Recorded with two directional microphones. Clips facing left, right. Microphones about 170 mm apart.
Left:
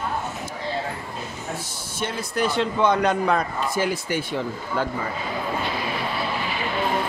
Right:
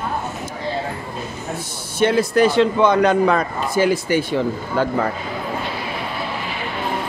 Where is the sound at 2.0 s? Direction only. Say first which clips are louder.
Right 10 dB; 85° right.